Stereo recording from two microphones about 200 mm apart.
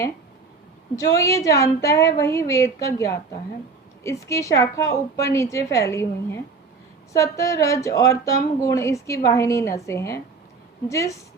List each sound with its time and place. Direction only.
0.9 s speech: 15° left (ahead or behind)